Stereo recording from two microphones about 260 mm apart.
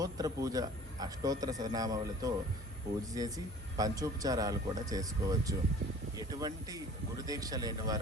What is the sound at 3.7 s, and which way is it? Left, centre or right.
A man's voice, centre.